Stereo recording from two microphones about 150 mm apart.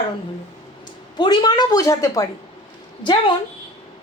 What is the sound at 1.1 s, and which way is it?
A woman's voice, 30° left (ahead or behind).